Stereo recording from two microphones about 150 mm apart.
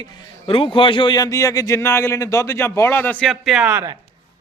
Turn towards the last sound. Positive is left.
turn(degrees=-10)  # may be behind; listen again after turning